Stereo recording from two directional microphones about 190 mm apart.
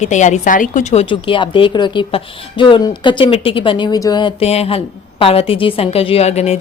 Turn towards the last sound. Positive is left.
turn(degrees=35)  # may be behind; listen again after turning